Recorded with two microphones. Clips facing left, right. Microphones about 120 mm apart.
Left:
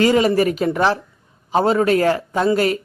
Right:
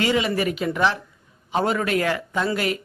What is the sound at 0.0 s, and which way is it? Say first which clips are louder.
A woman's voice: left 7 dB; 40° left (ahead or behind).